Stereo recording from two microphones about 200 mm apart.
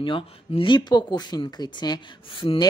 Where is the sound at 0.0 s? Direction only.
25° left (ahead or behind).